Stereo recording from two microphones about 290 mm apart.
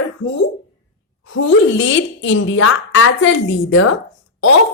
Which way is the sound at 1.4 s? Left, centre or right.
Left.